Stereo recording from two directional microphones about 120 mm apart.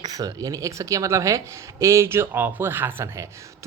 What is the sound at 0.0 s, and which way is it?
Speech, 30° right (ahead or behind).